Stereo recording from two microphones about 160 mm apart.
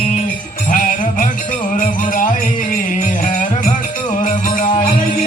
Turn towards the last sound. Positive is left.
turn(degrees=55)  # may be behind; listen again after turning